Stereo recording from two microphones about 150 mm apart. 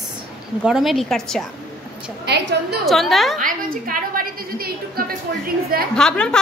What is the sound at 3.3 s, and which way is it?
A woman's voice, 70° right (ahead or behind).